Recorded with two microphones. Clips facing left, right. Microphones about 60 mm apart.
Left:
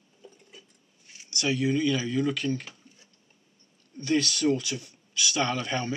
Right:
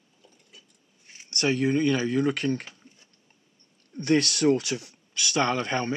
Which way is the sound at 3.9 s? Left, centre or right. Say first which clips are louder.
Right 3 dB; right.